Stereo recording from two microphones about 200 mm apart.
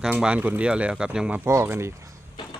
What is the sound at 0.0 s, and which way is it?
Speech, 5° right (ahead or behind).